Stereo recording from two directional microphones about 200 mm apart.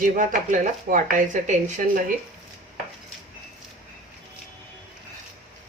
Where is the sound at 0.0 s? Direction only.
40° right (ahead or behind).